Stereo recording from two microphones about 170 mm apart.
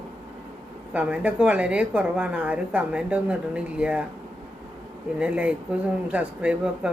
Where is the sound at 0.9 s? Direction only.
5° right (ahead or behind).